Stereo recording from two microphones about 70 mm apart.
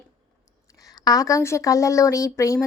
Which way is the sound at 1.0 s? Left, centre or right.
Left.